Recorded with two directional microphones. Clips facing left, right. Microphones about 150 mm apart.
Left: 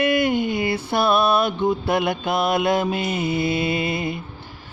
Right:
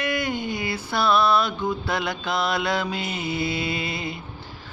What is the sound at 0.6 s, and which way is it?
Music, 55° left (ahead or behind).